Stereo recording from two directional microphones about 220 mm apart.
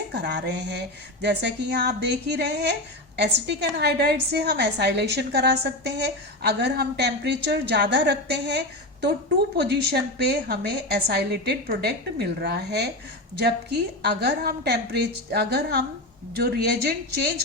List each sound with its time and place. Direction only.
0.2 s a woman's voice: 50° right (ahead or behind)
14.0 s a woman's voice: 45° right (ahead or behind)